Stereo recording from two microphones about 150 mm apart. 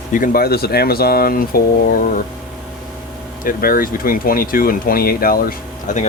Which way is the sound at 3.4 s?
75° left (ahead or behind).